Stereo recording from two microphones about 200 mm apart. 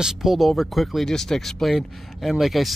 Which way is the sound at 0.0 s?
Centre (ahead or behind).